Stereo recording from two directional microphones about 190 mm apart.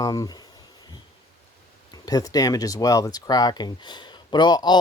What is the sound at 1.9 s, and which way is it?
Speech, 20° left (ahead or behind).